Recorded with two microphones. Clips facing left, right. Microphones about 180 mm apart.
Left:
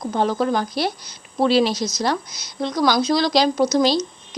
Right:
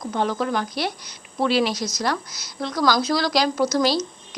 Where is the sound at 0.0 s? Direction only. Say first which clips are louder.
Left 3 dB; 35° left (ahead or behind).